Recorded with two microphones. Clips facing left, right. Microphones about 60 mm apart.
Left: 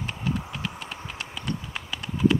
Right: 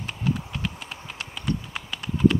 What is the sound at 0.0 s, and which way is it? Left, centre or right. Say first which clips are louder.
Clip-clop: right 1 dB; centre.